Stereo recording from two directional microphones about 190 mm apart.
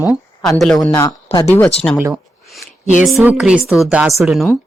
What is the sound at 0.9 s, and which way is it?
Speech, 15° left (ahead or behind).